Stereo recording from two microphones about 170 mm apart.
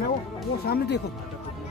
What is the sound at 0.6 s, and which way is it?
Speech, 70° left (ahead or behind).